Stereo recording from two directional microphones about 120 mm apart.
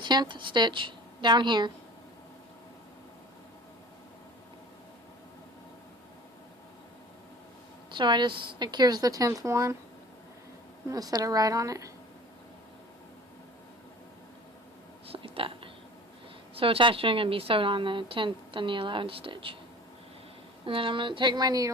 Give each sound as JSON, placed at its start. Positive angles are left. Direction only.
{"t": 0.0, "sound": "a woman's voice", "side_deg": -40}
{"t": 7.9, "sound": "a woman's voice", "side_deg": -40}
{"t": 10.8, "sound": "a woman's voice", "side_deg": -30}
{"t": 15.1, "sound": "a sound", "side_deg": -50}
{"t": 16.6, "sound": "a woman's voice", "side_deg": -50}
{"t": 20.7, "sound": "a woman's voice", "side_deg": -45}